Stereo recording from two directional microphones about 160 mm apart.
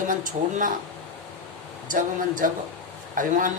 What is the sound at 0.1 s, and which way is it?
Speech, 55° right (ahead or behind).